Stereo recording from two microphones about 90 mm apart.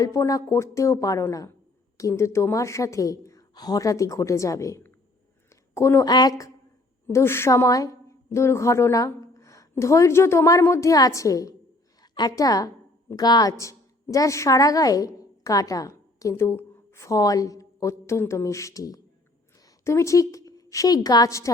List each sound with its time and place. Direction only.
0.0 s a woman's voice: 35° left (ahead or behind)
6.1 s a woman's voice: 50° left (ahead or behind)
7.1 s a woman's voice: 30° left (ahead or behind); by 13.5 s 50° left (ahead or behind)
13.5 s a woman's voice: 35° left (ahead or behind)
17.2 s a woman's voice: 40° left (ahead or behind)